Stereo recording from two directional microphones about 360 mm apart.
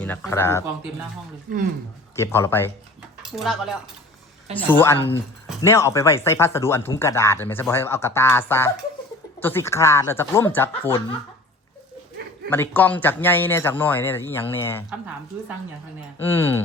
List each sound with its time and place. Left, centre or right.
0.0 s speech: centre
2.1 s speech: centre
12.5 s speech: centre
16.2 s speech: centre